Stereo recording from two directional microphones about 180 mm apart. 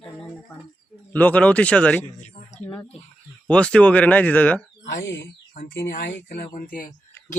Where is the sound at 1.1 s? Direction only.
10° left (ahead or behind).